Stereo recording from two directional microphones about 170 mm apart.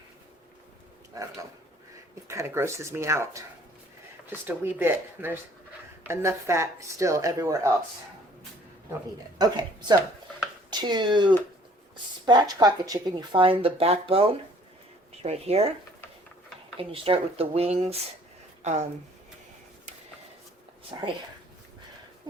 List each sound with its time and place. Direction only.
1.1 s a woman's voice: 20° right (ahead or behind)
9.4 s speech: 25° right (ahead or behind)
16.7 s speech: 30° right (ahead or behind)
20.9 s speech: 25° right (ahead or behind)